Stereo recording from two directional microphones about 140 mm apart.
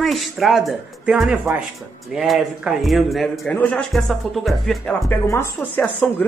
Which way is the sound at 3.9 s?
Centre (ahead or behind).